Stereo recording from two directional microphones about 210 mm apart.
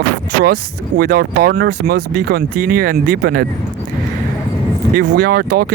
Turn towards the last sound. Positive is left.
turn(degrees=-45)  # may be behind; listen again after turning